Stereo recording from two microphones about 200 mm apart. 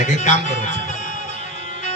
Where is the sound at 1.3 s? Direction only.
35° left (ahead or behind).